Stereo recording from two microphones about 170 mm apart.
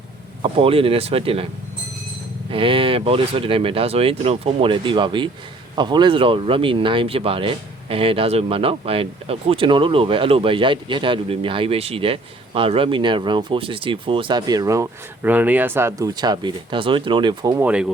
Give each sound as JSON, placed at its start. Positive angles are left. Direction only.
{"t": 0.4, "sound": "speech", "side_deg": -35}
{"t": 2.5, "sound": "speech", "side_deg": -30}
{"t": 17.6, "sound": "speech", "side_deg": -5}